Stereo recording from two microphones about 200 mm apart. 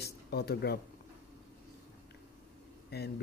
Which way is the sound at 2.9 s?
55° left (ahead or behind).